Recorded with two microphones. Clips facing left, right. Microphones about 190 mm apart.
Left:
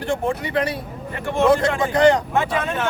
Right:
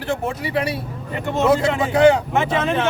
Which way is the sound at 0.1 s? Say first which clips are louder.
Even; 5° right (ahead or behind).